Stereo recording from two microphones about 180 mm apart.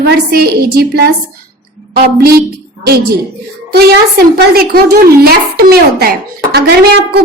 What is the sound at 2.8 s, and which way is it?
A woman's voice, 60° right (ahead or behind).